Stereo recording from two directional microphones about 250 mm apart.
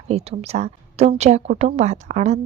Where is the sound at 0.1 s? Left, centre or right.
Right.